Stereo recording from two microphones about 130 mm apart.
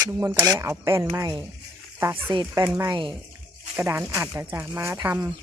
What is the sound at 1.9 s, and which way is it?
Stir, 15° right (ahead or behind).